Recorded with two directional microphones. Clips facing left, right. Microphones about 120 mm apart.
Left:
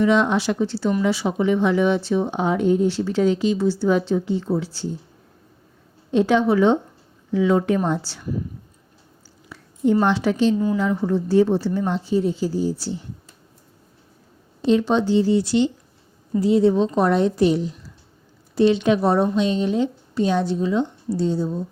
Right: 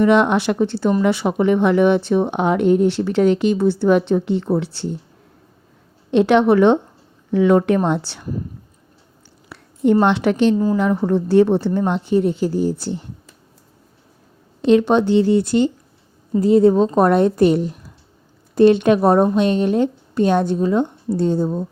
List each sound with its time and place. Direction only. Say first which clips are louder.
0.0 s speech: right 4 dB; 60° right (ahead or behind)
6.1 s a woman's voice: right 4 dB; 70° right (ahead or behind)
9.5 s a woman's voice: right 3 dB; 65° right (ahead or behind)
14.7 s a woman's voice: right 4 dB; 60° right (ahead or behind)